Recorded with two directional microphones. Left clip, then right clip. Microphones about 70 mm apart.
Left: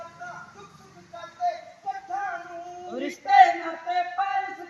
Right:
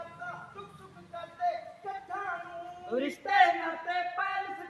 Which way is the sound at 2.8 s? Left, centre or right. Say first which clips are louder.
Left 5 dB; right.